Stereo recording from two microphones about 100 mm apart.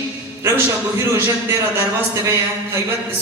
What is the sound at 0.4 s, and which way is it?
A man's voice, 25° right (ahead or behind).